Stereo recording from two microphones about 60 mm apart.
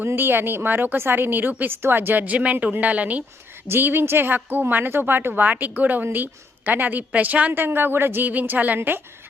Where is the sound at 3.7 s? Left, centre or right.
Right.